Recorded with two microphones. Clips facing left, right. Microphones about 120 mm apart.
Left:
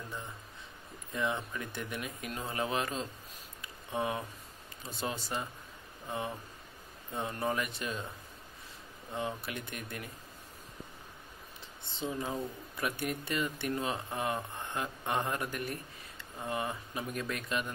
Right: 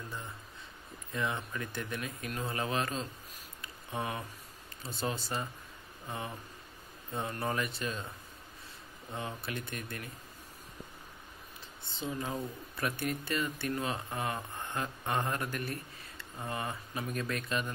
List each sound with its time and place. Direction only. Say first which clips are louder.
1.1 s a man's voice: left 1 dB; 15° left (ahead or behind)
7.2 s a man's voice: left 1 dB; 15° left (ahead or behind)
9.1 s a man's voice: left 2 dB; 15° left (ahead or behind)
12.2 s a man's voice: left 1 dB; 15° left (ahead or behind)